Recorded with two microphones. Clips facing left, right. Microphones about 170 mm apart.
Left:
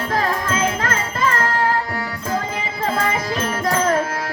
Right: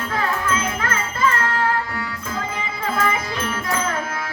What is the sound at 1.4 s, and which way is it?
Carnatic music, 35° left (ahead or behind).